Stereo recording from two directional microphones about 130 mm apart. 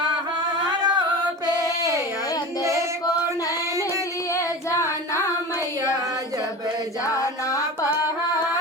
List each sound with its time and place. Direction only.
0.6 s singing: 35° right (ahead or behind)
4.4 s child singing: 20° left (ahead or behind)
7.1 s carnatic music: 25° left (ahead or behind)